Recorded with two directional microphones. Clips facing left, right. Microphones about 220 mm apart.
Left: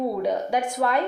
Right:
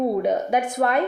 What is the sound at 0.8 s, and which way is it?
Speech, 55° right (ahead or behind).